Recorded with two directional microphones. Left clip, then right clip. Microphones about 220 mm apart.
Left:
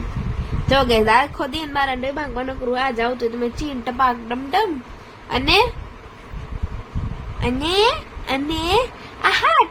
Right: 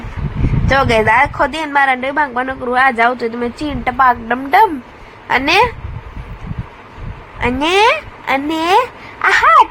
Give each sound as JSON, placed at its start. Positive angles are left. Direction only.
{"t": 0.7, "sound": "a woman's voice", "side_deg": -15}
{"t": 7.3, "sound": "a woman's voice", "side_deg": -15}